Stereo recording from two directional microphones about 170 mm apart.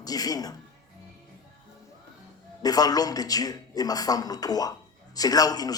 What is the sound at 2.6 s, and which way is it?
A man's voice, 20° left (ahead or behind).